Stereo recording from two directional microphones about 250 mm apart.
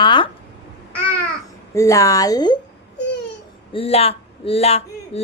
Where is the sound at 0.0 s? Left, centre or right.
Centre.